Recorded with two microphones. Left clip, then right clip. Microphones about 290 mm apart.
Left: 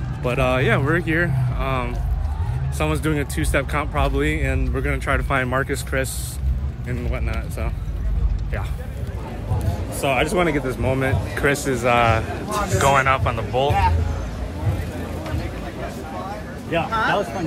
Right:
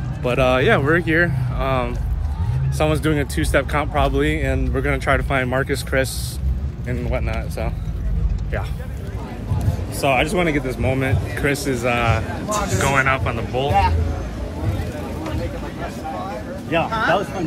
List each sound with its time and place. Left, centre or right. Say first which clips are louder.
0.2 s speech: right 3 dB; centre
10.0 s speech: right 1 dB; centre
12.0 s speech: left 3 dB; left
12.4 s speech: right 3 dB; right
12.7 s speech: left 2 dB; centre
16.9 s speech: right 1 dB; centre